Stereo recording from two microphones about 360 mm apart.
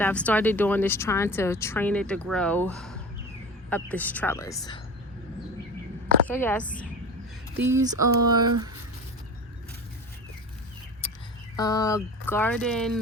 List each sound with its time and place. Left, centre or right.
0.0 s speech: centre
6.2 s speech: centre
7.5 s speech: centre
11.0 s a sound: centre
11.5 s speech: centre